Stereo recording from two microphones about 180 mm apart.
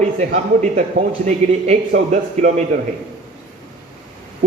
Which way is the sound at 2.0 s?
40° right (ahead or behind).